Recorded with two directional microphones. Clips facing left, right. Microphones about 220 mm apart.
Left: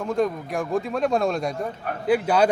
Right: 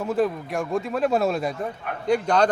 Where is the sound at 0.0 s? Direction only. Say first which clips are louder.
Even; 5° right (ahead or behind).